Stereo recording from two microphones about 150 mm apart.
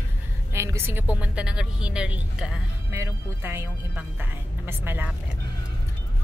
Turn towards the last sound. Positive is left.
turn(degrees=-15)  # may be behind; listen again after turning